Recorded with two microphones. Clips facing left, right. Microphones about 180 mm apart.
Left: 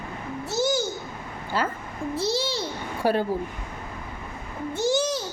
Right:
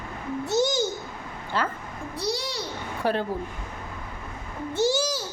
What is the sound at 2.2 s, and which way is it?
Babbling, centre (ahead or behind).